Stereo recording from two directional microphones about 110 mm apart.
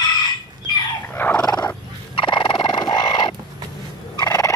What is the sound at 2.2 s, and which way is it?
Turkey, 50° left (ahead or behind).